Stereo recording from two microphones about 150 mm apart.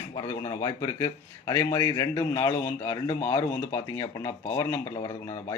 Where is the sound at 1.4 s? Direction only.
20° left (ahead or behind).